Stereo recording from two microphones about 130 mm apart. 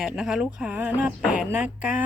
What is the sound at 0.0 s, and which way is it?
Speech, 5° right (ahead or behind).